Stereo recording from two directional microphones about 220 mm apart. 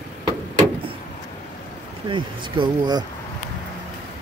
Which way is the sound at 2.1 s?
20° right (ahead or behind).